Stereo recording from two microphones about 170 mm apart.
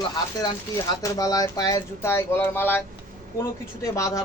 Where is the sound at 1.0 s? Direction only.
20° left (ahead or behind).